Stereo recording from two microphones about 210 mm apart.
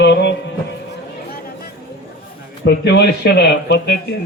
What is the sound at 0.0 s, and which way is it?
Music, 55° left (ahead or behind).